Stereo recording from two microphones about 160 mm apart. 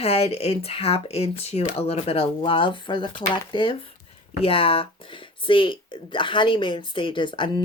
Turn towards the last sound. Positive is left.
turn(degrees=30)  # may be behind; listen again after turning